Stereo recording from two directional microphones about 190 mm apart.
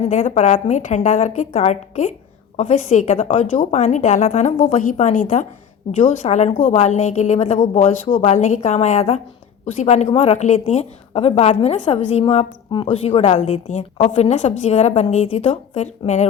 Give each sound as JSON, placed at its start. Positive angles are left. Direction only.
{"t": 0.0, "sound": "a woman's voice", "side_deg": 40}